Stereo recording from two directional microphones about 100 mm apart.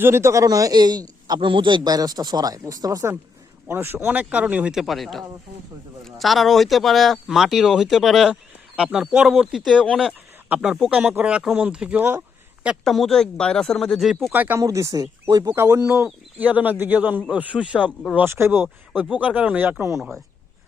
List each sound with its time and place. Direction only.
0.0 s a man's voice: 25° right (ahead or behind)
3.7 s speech: 25° right (ahead or behind); by 10.2 s 5° left (ahead or behind)
10.5 s speech: 5° right (ahead or behind)
12.8 s speech: centre (ahead or behind)
14.3 s speech: 20° right (ahead or behind)
14.6 s a man's voice: 30° right (ahead or behind)
15.5 s speech: 30° right (ahead or behind)
16.0 s speech: 15° right (ahead or behind)
18.3 s speech: 25° right (ahead or behind)
19.0 s speech: 15° right (ahead or behind)
20.0 s speech: centre (ahead or behind)